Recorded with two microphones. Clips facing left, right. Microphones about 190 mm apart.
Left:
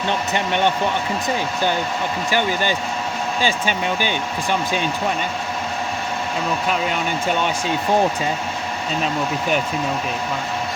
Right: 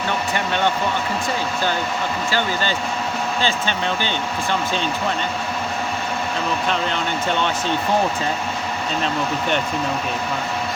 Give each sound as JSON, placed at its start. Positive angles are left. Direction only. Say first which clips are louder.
{"t": 0.3, "sound": "speech", "louder": "left 2 dB", "side_deg": 20}
{"t": 2.3, "sound": "speech", "louder": "left 4 dB", "side_deg": 15}
{"t": 6.7, "sound": "speech", "louder": "left 1 dB", "side_deg": 10}